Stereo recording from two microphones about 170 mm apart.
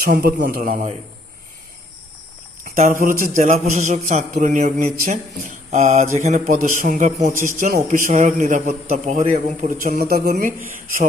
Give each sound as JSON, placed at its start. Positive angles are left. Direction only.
{"t": 0.0, "sound": "a man's voice", "side_deg": -60}
{"t": 3.0, "sound": "a man's voice", "side_deg": -55}